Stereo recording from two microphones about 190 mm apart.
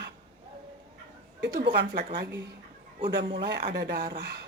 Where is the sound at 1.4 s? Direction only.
60° right (ahead or behind).